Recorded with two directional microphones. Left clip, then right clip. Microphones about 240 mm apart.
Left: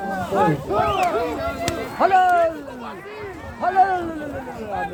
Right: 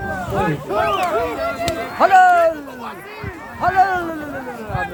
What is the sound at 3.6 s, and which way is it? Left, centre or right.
Music, right.